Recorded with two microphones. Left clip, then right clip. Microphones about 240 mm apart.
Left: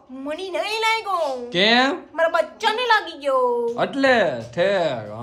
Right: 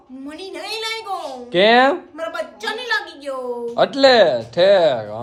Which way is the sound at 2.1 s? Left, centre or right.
Centre.